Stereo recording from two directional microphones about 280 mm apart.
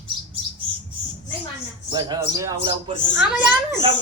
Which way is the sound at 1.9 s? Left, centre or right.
Centre.